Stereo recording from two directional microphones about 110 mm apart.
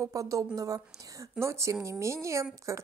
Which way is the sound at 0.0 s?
30° right (ahead or behind).